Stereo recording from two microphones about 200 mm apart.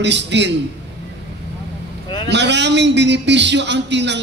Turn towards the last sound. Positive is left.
turn(degrees=-60)  # may be behind; listen again after turning